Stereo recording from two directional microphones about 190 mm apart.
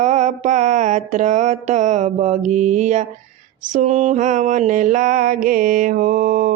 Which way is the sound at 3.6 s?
40° right (ahead or behind).